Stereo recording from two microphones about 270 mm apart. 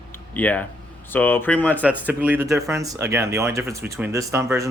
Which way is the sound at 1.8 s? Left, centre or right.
Centre.